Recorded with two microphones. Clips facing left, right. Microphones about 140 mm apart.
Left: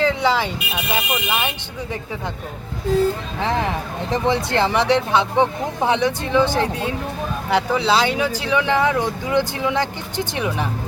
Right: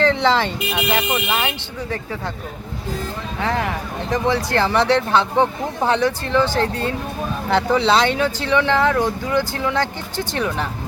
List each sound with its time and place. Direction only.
0.0 s speech: 10° left (ahead or behind)
4.1 s speech: 25° left (ahead or behind)